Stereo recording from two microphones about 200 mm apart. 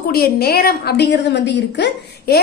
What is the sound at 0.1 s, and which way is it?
A woman's voice, 50° left (ahead or behind).